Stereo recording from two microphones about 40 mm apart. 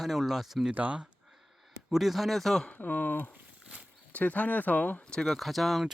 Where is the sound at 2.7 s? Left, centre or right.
Left.